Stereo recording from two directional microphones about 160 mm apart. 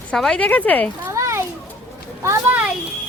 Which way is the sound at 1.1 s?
20° right (ahead or behind).